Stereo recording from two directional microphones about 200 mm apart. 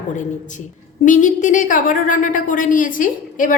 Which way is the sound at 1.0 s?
40° left (ahead or behind).